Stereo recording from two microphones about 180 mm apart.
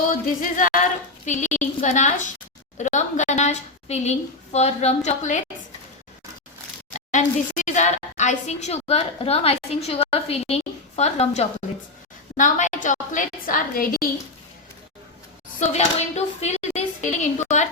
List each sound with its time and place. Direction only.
0.1 s a woman's voice: 50° left (ahead or behind)
7.1 s a woman's voice: 45° left (ahead or behind)
15.5 s speech: 40° left (ahead or behind)